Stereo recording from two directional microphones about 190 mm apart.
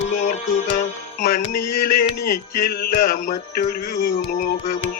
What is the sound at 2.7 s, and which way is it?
Music, 50° left (ahead or behind).